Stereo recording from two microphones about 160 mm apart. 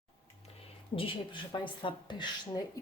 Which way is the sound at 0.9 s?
30° left (ahead or behind).